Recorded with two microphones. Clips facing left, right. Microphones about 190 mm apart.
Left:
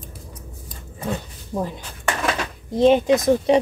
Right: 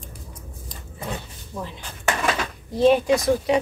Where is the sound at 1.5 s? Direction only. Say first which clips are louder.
Left 7 dB; 45° left (ahead or behind).